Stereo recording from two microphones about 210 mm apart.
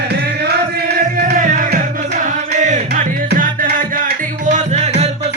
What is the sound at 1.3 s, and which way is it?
Music, 40° right (ahead or behind).